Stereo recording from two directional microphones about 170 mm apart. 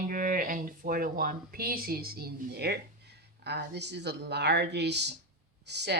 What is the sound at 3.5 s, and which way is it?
Speech, 80° right.